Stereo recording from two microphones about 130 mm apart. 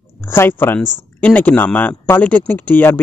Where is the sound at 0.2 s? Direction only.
15° left (ahead or behind).